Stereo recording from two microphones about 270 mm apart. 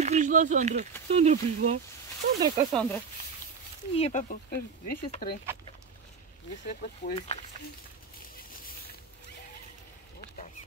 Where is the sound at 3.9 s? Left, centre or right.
Left.